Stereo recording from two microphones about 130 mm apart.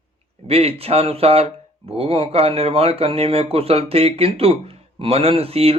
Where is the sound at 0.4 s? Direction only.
50° right (ahead or behind).